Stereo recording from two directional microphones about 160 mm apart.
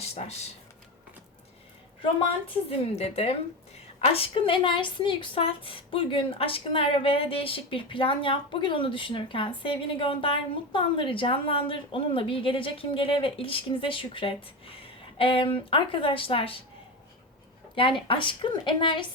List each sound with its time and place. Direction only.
0.0 s speech: 40° left (ahead or behind)
2.6 s a woman's voice: 40° left (ahead or behind)
17.7 s a woman's voice: 30° left (ahead or behind)